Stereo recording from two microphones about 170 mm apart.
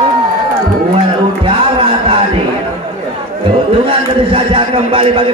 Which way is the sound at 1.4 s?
35° right (ahead or behind).